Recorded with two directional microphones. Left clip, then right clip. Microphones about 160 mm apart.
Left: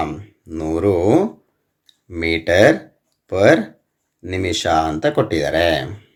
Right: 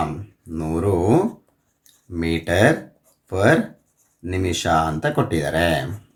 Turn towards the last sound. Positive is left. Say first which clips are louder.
# left 3 dB
turn(degrees=25)  # may be behind; listen again after turning